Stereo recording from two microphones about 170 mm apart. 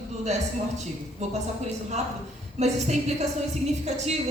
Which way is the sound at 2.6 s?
40° right (ahead or behind).